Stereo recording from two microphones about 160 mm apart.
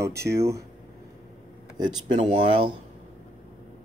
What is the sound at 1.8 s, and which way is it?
Speech, 30° right (ahead or behind).